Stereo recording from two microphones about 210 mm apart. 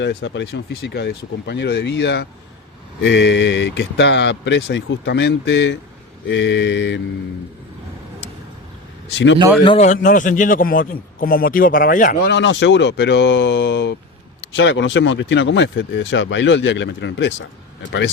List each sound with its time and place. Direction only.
0.0 s speech: 55° left (ahead or behind)
9.0 s speech: 60° left (ahead or behind)
9.6 s a man's voice: 30° left (ahead or behind)
12.2 s speech: 55° left (ahead or behind)